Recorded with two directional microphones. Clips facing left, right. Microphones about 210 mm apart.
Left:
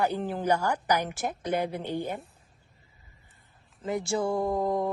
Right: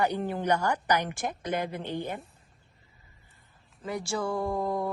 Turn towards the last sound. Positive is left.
turn(degrees=20)  # may be behind; listen again after turning